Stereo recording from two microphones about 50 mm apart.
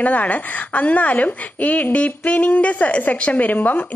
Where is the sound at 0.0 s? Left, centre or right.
Left.